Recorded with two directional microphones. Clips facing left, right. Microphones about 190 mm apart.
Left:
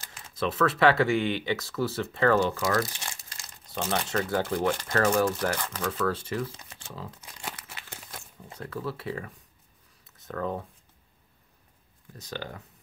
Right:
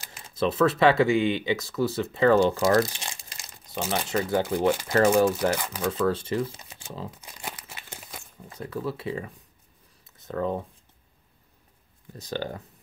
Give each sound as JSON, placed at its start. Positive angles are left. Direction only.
{"t": 0.4, "sound": "speech", "side_deg": -20}
{"t": 6.9, "sound": "crumpling", "side_deg": -20}
{"t": 8.5, "sound": "speech", "side_deg": -15}
{"t": 12.1, "sound": "speech", "side_deg": -30}